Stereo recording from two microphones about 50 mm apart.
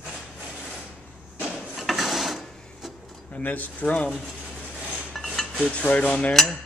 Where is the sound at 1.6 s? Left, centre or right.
Centre.